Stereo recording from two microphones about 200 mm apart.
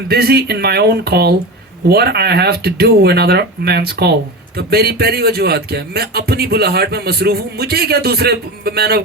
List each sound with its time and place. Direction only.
0.1 s speech: 50° right (ahead or behind)